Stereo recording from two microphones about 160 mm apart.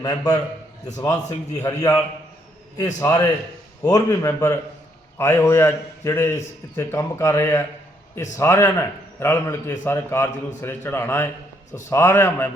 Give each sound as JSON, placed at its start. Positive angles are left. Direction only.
{"t": 0.0, "sound": "a man's voice", "side_deg": 25}